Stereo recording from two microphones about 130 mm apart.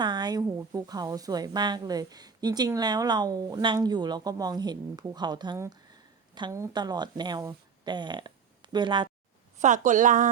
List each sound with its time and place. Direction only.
0.0 s a sound: 35° right (ahead or behind)
0.7 s a woman's voice: 30° right (ahead or behind)
9.6 s a woman's voice: 70° right (ahead or behind)